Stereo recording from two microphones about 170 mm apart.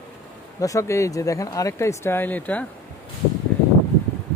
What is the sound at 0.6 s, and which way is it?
Speech, 20° left (ahead or behind).